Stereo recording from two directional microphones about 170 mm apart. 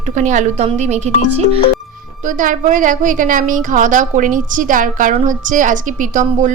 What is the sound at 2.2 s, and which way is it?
A woman's voice, 50° right (ahead or behind).